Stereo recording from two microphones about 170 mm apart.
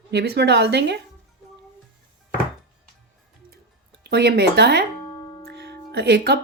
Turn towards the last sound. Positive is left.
turn(degrees=-85)